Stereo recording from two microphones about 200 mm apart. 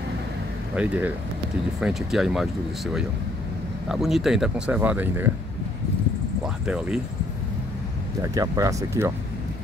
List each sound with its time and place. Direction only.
0.7 s speech: 5° right (ahead or behind)
6.4 s speech: 5° right (ahead or behind)
8.2 s speech: 15° right (ahead or behind)